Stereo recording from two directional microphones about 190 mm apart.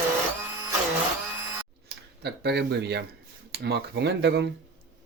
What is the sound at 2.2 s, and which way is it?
Speech, 60° right (ahead or behind).